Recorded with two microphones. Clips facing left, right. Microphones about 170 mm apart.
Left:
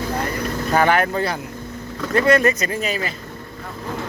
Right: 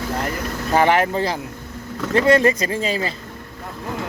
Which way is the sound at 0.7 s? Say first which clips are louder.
Right 1 dB; 25° right (ahead or behind).